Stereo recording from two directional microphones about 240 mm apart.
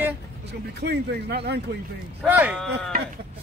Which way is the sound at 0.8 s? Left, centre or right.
Right.